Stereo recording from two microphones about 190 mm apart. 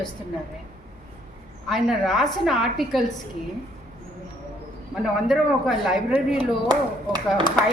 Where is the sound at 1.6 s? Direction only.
Centre (ahead or behind).